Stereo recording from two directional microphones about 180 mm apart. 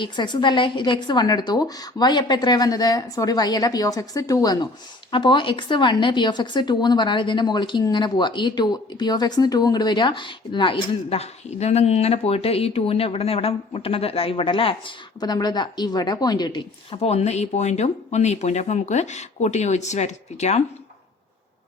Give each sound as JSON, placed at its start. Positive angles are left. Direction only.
{"t": 0.0, "sound": "speech", "side_deg": 25}